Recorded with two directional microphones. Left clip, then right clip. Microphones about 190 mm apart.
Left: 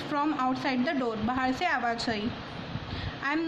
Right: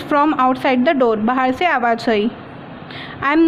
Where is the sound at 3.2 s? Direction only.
45° right (ahead or behind).